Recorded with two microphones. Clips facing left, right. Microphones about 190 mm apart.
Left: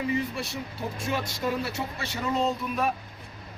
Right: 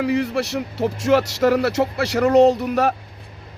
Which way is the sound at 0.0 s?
80° right.